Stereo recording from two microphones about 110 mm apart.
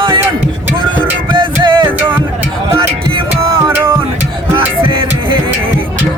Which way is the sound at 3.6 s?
25° right (ahead or behind).